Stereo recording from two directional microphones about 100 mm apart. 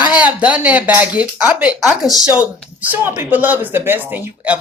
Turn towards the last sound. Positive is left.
turn(degrees=-15)  # may be behind; listen again after turning